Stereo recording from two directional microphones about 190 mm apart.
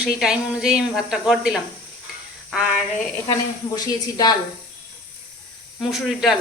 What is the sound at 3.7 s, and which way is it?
Speech, 20° left (ahead or behind).